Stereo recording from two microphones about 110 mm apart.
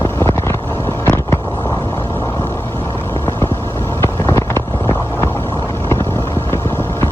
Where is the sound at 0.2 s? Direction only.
25° left (ahead or behind).